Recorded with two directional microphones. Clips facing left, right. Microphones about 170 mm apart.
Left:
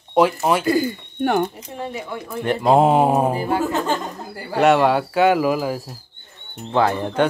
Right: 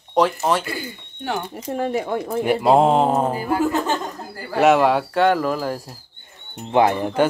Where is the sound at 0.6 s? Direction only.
40° left (ahead or behind).